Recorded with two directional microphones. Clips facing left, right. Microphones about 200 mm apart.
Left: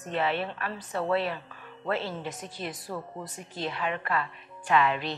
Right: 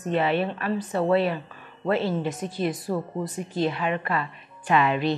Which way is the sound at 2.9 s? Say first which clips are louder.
Right 9 dB; 30° right (ahead or behind).